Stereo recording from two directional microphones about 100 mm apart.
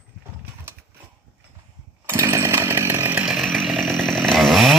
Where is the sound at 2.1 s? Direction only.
25° right (ahead or behind).